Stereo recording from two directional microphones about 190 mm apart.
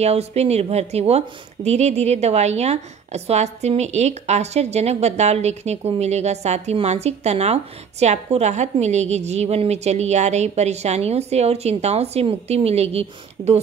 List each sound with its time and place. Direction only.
0.0 s a woman's voice: 35° right (ahead or behind)